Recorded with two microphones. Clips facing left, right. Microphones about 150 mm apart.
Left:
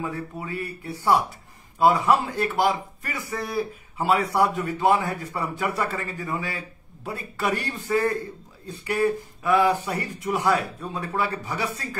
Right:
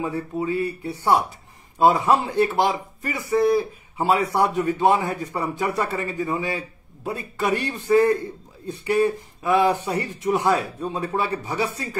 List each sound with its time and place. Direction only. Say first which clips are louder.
0.0 s speech: right 6 dB; 25° right (ahead or behind)